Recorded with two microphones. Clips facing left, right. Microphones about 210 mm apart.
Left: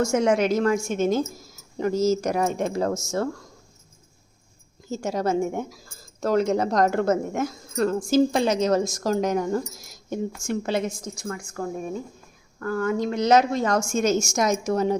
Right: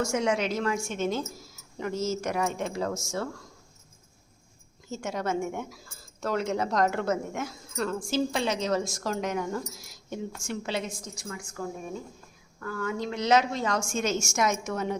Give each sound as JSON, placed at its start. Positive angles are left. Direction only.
{"t": 0.0, "sound": "a woman's voice", "side_deg": 45}
{"t": 4.9, "sound": "a woman's voice", "side_deg": 35}